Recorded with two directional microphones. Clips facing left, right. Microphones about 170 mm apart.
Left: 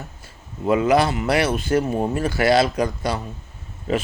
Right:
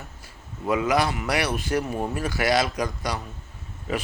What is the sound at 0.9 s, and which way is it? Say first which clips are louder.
Speech: left 6 dB; 25° left (ahead or behind).